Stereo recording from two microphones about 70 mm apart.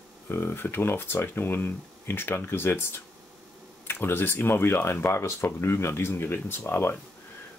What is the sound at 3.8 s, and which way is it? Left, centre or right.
Speech, left.